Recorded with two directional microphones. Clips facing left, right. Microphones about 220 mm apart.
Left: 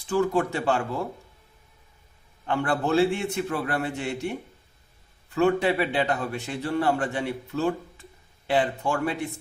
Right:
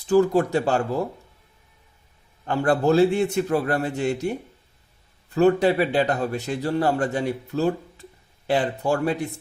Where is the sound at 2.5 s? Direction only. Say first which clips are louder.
Right 5 dB; 40° right (ahead or behind).